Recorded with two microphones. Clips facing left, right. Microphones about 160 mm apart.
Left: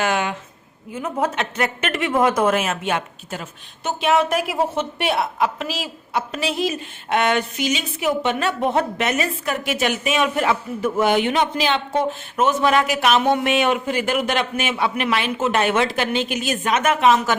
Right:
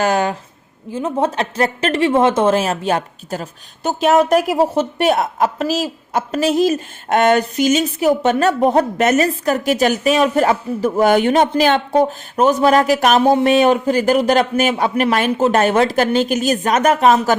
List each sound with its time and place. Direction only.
0.0 s speech: 40° right (ahead or behind)